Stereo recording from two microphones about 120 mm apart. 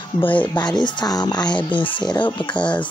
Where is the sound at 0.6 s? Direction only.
35° left (ahead or behind).